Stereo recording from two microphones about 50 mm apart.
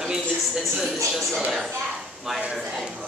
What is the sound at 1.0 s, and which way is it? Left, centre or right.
Speech, centre.